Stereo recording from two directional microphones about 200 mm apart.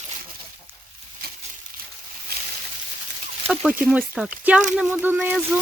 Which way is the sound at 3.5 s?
5° right (ahead or behind).